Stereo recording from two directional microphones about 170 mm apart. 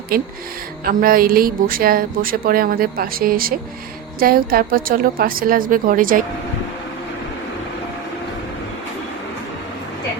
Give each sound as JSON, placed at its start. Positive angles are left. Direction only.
{"t": 0.1, "sound": "a woman's voice", "side_deg": -60}